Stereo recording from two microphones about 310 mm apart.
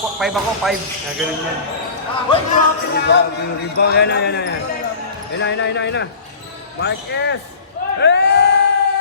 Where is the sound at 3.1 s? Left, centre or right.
Left.